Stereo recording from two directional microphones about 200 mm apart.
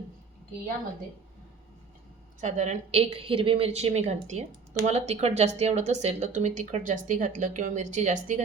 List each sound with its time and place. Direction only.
2.4 s a woman's voice: 35° right (ahead or behind)